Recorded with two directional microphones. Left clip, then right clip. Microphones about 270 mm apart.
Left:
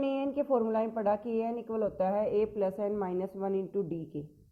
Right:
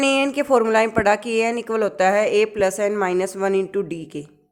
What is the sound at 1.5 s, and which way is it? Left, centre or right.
Speech, right.